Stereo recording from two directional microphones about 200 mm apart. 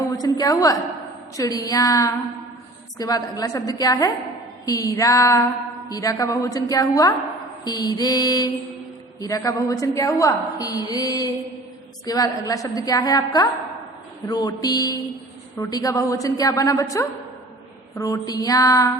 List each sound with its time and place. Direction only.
0.2 s a woman's voice: 20° left (ahead or behind)